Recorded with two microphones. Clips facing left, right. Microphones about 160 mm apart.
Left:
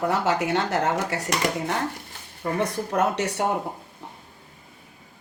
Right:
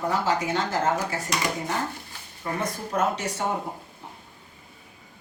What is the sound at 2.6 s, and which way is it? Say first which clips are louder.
Speech: left 2 dB; 70° left (ahead or behind).